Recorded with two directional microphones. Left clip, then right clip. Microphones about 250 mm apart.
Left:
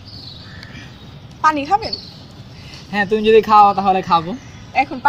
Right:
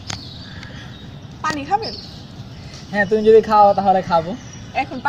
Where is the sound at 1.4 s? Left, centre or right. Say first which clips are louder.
Left 5 dB; left.